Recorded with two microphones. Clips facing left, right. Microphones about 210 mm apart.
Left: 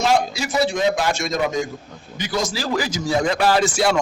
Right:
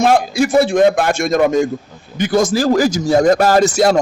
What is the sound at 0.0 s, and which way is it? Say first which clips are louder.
A man's voice: right 6 dB; 55° right (ahead or behind).